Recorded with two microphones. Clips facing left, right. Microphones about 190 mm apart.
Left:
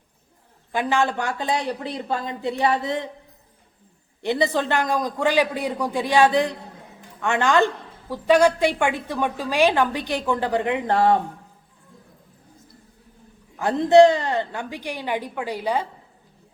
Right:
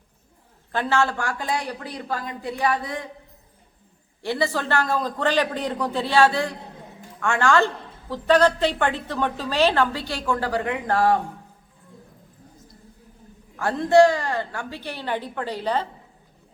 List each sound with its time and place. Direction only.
0.7 s a woman's voice: 15° left (ahead or behind)
4.2 s a woman's voice: 20° left (ahead or behind)
13.6 s a woman's voice: 20° left (ahead or behind)